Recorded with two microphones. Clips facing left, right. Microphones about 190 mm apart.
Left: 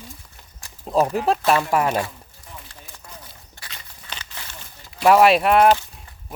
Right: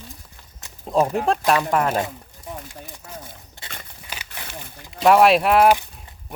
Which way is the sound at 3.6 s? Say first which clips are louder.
Right 3 dB; 25° right (ahead or behind).